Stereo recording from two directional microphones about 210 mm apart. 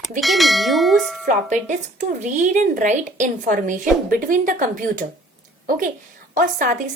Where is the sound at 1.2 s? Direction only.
35° right (ahead or behind).